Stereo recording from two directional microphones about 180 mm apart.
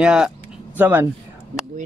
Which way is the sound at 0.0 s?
5° right (ahead or behind).